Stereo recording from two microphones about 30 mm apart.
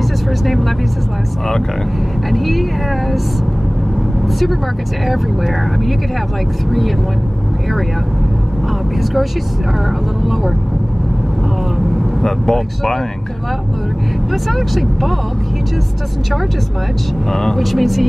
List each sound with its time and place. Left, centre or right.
2.3 s speech: centre
5.0 s speech: centre
9.8 s speech: centre
12.2 s speech: centre
14.3 s speech: centre
17.3 s speech: centre
17.6 s speech: centre